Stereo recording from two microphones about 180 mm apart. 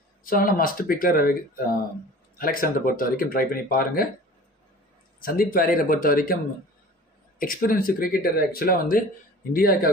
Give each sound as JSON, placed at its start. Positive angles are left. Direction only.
{"t": 0.2, "sound": "speech", "side_deg": 50}
{"t": 2.3, "sound": "speech", "side_deg": 55}
{"t": 5.2, "sound": "speech", "side_deg": 55}
{"t": 7.3, "sound": "speech", "side_deg": 55}